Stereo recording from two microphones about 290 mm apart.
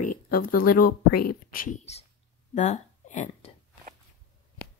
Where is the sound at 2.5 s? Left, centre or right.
Left.